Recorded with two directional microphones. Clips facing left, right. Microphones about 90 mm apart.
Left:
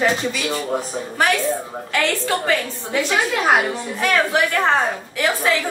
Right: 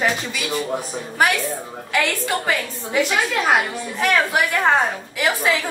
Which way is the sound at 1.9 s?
10° right (ahead or behind).